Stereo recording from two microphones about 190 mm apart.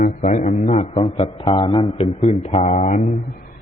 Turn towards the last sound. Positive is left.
turn(degrees=30)  # may be behind; listen again after turning